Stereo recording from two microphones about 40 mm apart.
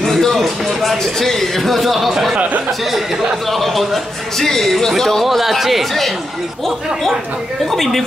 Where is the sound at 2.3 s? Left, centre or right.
Right.